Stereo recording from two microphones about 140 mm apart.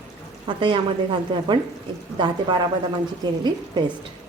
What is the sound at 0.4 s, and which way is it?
Speech, 35° right (ahead or behind).